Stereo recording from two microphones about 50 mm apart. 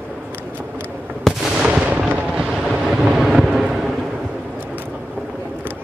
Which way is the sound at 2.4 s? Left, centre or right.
Centre.